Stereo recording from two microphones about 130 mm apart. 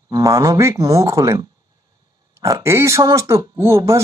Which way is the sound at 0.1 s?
25° right (ahead or behind).